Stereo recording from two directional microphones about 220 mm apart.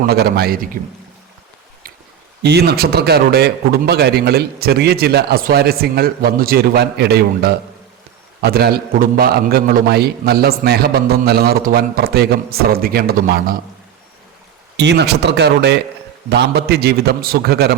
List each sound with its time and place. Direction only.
0.0 s a man's voice: 45° right (ahead or behind)
2.4 s a man's voice: 45° right (ahead or behind)
14.8 s a man's voice: 50° right (ahead or behind)